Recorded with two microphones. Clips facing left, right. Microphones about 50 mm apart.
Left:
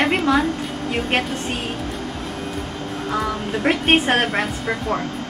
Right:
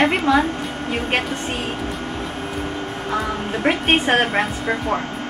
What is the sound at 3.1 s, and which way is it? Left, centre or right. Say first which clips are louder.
Music: even; centre.